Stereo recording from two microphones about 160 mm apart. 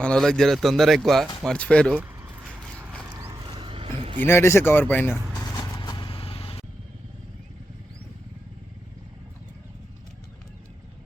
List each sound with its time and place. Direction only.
0.0 s a man's voice: 5° left (ahead or behind)
3.1 s mechanisms: 20° right (ahead or behind)
3.4 s a sound: 30° right (ahead or behind)
4.2 s speech: 15° left (ahead or behind)
5.5 s vehicle: 25° left (ahead or behind)